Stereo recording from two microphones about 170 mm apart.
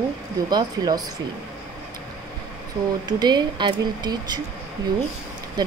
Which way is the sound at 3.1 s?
25° right (ahead or behind).